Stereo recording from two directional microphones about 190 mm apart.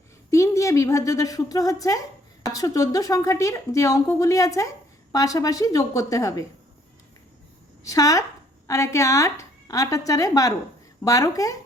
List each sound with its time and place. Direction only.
0.3 s a woman's voice: 15° left (ahead or behind)
7.9 s a woman's voice: 20° left (ahead or behind)